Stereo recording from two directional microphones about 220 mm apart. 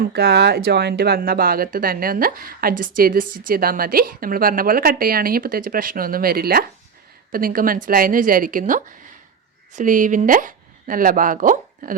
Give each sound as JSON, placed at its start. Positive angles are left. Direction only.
{"t": 0.0, "sound": "speech", "side_deg": -45}